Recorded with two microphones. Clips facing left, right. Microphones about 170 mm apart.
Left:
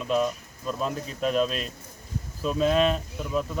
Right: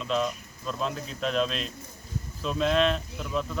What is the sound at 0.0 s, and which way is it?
Speech, 10° left (ahead or behind).